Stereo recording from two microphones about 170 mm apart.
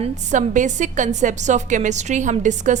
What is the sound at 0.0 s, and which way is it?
A woman's voice, 45° right (ahead or behind).